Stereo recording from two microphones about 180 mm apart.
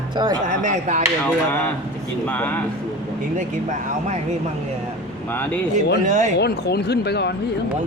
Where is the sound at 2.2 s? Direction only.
10° left (ahead or behind).